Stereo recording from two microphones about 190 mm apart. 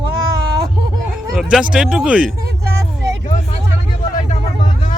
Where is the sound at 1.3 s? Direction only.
Centre (ahead or behind).